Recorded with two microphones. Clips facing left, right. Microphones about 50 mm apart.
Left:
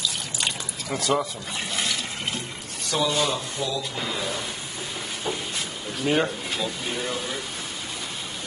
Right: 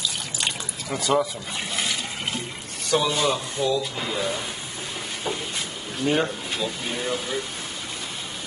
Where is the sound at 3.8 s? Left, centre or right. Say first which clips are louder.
Right 2 dB; centre.